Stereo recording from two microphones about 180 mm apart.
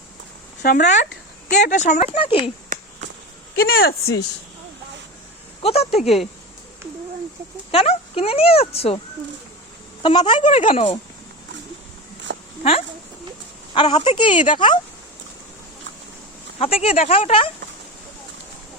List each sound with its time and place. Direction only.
0.6 s speech: 55° left (ahead or behind)
1.6 s speech: 45° left (ahead or behind)
2.1 s speech: 30° left (ahead or behind)
2.7 s a sound: 45° right (ahead or behind)
3.6 s speech: 55° left (ahead or behind)
5.6 s speech: 35° left (ahead or behind)
7.7 s speech: 30° left (ahead or behind)
10.0 s a woman's voice: 25° left (ahead or behind)
12.3 s a sound: 80° right
13.7 s a woman's voice: 35° left (ahead or behind)
16.6 s a woman's voice: 35° left (ahead or behind)